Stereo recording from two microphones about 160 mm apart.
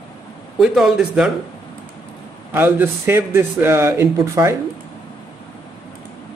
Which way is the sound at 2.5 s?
15° right (ahead or behind).